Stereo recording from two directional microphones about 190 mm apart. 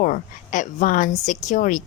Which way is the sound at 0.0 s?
45° left (ahead or behind).